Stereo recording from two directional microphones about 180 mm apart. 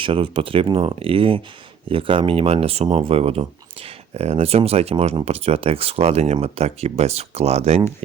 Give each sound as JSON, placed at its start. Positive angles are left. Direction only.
{"t": 0.0, "sound": "speech", "side_deg": -30}